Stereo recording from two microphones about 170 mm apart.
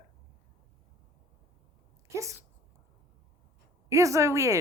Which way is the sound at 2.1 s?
15° right (ahead or behind).